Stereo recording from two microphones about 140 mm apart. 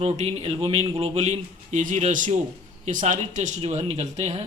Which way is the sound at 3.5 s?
50° right (ahead or behind).